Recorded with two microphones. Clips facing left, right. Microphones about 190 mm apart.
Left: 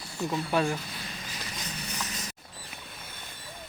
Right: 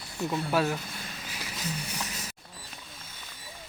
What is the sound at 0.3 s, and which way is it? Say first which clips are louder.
Speech: even; 5° right (ahead or behind).